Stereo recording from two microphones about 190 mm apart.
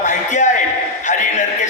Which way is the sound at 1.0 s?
40° left (ahead or behind).